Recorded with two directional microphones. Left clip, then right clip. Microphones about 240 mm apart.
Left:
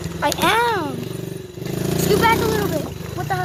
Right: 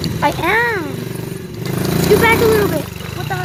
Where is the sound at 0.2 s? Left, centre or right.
Centre.